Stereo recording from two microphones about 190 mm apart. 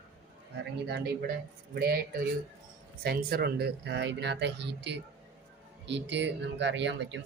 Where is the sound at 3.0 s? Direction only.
55° right (ahead or behind).